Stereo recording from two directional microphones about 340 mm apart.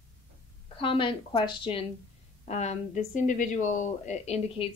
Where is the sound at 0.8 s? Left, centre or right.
Centre.